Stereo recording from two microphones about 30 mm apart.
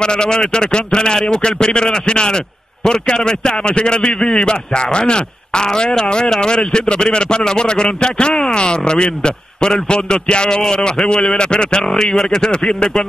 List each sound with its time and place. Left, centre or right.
0.0 s a man's voice: left